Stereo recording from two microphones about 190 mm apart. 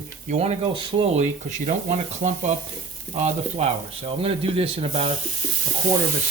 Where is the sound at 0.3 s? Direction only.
35° right (ahead or behind).